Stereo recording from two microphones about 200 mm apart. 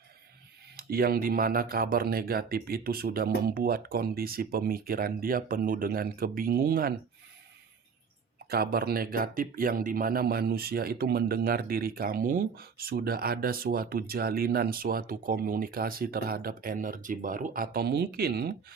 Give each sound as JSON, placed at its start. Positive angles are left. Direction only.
{"t": 0.8, "sound": "speech", "side_deg": -50}
{"t": 8.4, "sound": "speech", "side_deg": -50}